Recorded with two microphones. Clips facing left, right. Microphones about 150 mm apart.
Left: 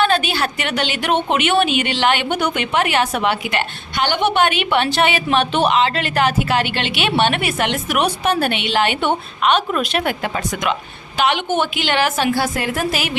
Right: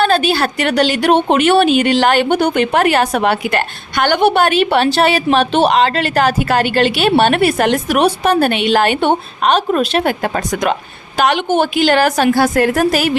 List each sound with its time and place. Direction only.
0.0 s a woman's voice: 35° right (ahead or behind)